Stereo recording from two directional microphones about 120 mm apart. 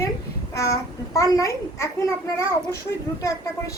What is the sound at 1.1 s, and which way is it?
Speech, 25° left (ahead or behind).